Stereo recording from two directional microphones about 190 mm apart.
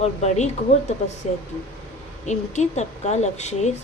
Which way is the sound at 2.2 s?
35° left (ahead or behind).